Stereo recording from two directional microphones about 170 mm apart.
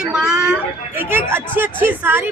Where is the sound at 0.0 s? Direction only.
5° right (ahead or behind).